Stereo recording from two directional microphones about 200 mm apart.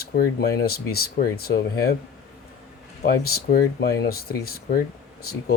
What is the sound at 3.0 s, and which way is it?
Speech, 50° left (ahead or behind).